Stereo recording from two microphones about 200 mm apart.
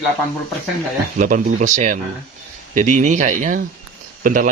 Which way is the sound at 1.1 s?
40° right (ahead or behind).